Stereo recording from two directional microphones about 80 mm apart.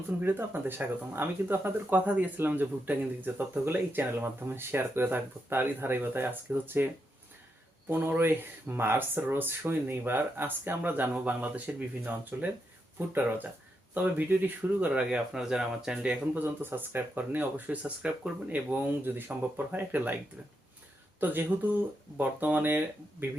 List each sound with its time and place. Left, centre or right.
0.2 s speech: right
7.9 s speech: right
14.9 s speech: centre
16.3 s speech: right
21.2 s speech: right